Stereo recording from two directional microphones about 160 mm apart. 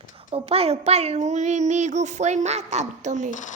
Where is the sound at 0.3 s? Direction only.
40° right (ahead or behind).